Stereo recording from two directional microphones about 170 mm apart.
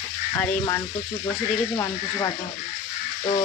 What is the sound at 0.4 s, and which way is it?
Frying, 20° left (ahead or behind).